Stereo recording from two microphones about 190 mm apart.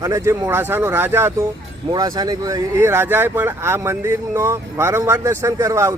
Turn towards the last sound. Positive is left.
turn(degrees=-15)  # may be behind; listen again after turning